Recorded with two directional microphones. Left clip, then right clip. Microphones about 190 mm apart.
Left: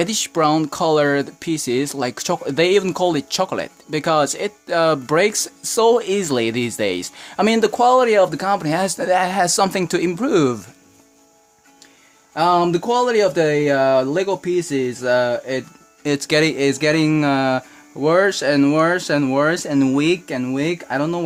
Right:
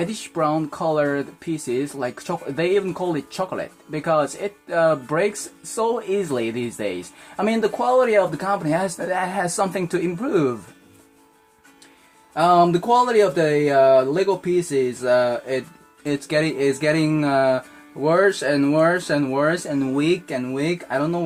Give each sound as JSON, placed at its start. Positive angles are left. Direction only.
{"t": 0.0, "sound": "speech", "side_deg": 60}
{"t": 12.3, "sound": "speech", "side_deg": 50}